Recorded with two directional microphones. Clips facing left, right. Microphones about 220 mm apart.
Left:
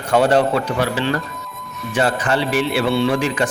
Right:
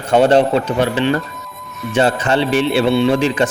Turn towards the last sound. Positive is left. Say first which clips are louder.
# right 4 dB
turn(degrees=-25)  # may be behind; listen again after turning